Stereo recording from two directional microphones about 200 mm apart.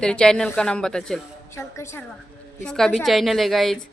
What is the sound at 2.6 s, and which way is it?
Speech, centre (ahead or behind).